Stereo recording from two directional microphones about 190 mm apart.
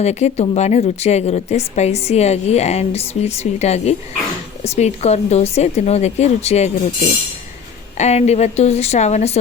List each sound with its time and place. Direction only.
0.0 s speech: 35° left (ahead or behind)
7.9 s speech: 35° left (ahead or behind)